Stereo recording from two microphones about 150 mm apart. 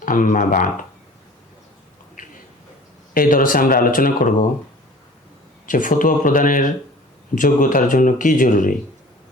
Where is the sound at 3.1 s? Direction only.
70° left (ahead or behind).